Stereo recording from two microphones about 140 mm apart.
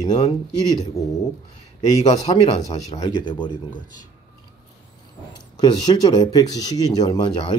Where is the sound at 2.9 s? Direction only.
30° left (ahead or behind).